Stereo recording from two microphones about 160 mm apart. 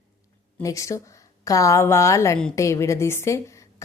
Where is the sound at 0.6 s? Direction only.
20° left (ahead or behind).